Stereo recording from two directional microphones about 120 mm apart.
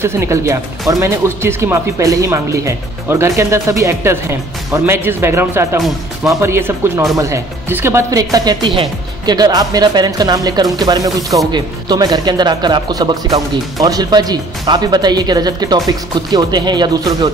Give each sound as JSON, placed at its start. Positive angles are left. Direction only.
{"t": 0.0, "sound": "speech", "side_deg": -20}